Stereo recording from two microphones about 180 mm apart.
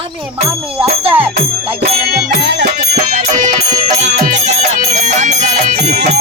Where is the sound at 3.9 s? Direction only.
40° right (ahead or behind).